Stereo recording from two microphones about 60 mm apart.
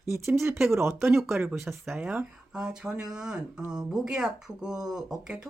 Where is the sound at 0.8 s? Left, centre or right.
Right.